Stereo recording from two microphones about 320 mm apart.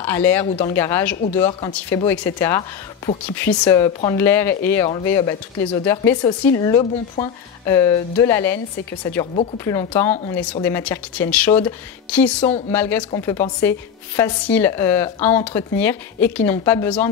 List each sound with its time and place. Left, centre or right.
0.0 s speech: centre
9.7 s a woman's voice: centre